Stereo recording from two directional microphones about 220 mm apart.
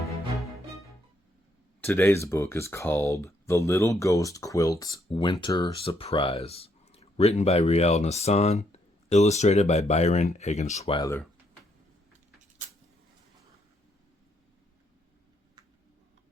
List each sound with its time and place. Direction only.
1.8 s speech: 10° left (ahead or behind)